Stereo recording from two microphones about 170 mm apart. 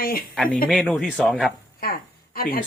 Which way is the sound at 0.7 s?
Centre (ahead or behind).